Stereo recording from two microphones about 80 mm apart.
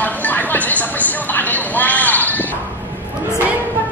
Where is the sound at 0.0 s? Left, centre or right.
Left.